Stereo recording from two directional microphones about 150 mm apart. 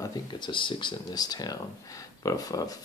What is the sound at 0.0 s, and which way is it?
Speech, 30° left (ahead or behind).